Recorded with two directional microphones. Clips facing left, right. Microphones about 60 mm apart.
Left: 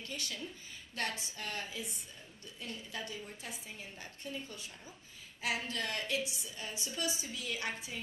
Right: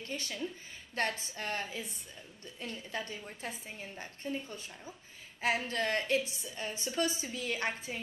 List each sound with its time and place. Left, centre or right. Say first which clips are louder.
0.0 s a woman's voice: right 4 dB; right